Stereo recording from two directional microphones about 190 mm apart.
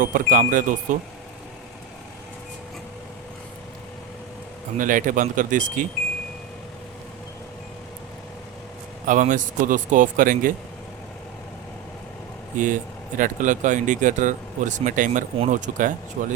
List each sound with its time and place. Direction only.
0.0 s speech: 45° right (ahead or behind)
4.8 s speech: 45° right (ahead or behind)
9.0 s speech: 40° right (ahead or behind)
12.5 s speech: 45° right (ahead or behind)